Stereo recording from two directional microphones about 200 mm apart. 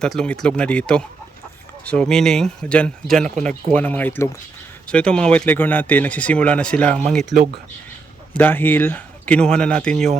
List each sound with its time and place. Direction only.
0.0 s speech: 5° left (ahead or behind)